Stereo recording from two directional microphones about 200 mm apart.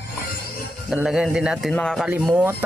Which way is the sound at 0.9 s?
Centre (ahead or behind).